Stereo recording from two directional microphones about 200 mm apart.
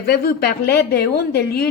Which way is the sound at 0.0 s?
50° left (ahead or behind).